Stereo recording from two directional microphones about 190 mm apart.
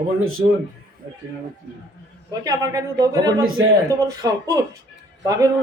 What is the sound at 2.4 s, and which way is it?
A man's voice, 20° right (ahead or behind).